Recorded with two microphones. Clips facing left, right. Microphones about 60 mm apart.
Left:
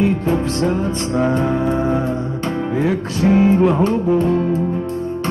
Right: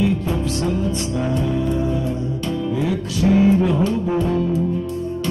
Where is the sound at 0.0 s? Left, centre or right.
Left.